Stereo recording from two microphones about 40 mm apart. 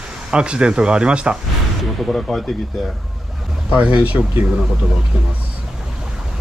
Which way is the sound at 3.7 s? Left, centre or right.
Right.